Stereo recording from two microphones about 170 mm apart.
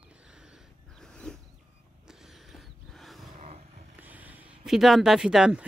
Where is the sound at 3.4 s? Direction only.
45° right (ahead or behind).